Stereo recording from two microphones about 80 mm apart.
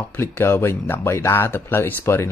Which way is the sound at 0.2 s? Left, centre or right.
Left.